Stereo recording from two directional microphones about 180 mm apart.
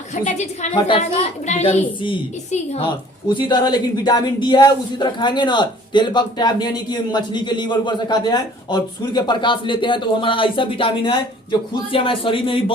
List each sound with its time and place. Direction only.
0.1 s a woman's voice: 40° left (ahead or behind)